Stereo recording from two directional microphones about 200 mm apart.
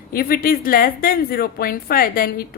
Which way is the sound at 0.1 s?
45° left (ahead or behind).